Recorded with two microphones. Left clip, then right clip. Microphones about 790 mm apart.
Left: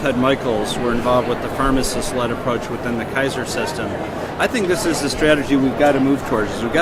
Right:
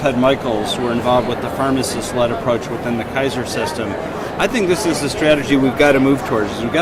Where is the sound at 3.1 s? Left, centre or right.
Right.